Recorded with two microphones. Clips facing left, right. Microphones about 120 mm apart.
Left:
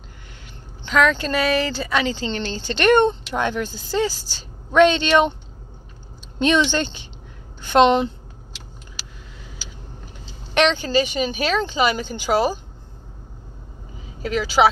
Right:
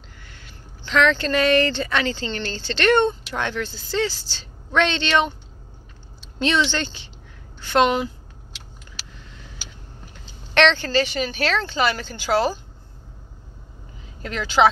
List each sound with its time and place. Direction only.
0.8 s a woman's voice: 10° left (ahead or behind)
10.5 s speech: 15° left (ahead or behind)
14.2 s speech: 10° left (ahead or behind)